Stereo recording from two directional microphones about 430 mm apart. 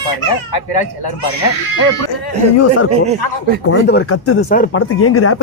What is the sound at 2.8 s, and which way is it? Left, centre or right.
Speech, centre.